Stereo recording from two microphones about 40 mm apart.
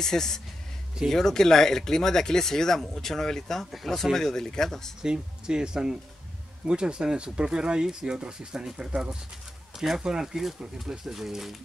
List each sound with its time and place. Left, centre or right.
0.0 s speech: centre
5.0 s speech: centre
11.1 s speech: centre